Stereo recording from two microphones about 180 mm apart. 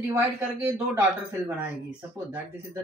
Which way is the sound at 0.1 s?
15° right (ahead or behind).